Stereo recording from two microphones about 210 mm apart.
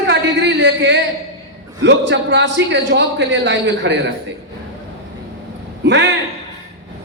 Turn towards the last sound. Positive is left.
turn(degrees=-55)  # may be behind; listen again after turning